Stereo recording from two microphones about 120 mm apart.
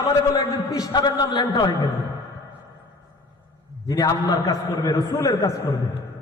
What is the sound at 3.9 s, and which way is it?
A man's voice, 30° left (ahead or behind).